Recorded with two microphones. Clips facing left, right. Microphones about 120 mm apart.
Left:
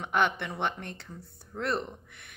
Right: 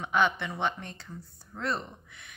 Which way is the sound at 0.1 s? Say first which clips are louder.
Right 1 dB; 60° left (ahead or behind).